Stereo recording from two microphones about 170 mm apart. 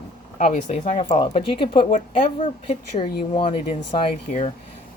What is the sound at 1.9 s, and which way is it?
Speech, 45° left (ahead or behind).